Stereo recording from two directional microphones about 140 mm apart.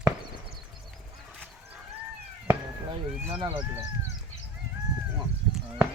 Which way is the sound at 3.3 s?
40° right (ahead or behind).